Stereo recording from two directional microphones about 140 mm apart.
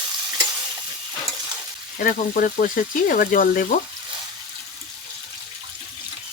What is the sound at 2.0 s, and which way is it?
Frying, 80° left.